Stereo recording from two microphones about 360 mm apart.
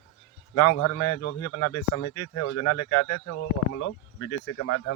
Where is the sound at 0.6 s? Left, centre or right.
Left.